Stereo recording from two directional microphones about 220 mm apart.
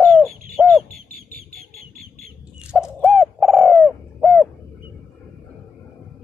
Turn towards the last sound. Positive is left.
turn(degrees=0)  # may be behind; listen again after turning